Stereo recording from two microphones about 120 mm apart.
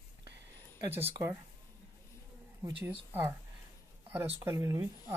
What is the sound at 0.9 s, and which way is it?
Speech, 20° right (ahead or behind).